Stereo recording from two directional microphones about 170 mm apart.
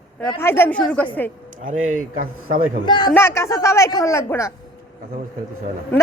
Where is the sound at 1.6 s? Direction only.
50° right (ahead or behind).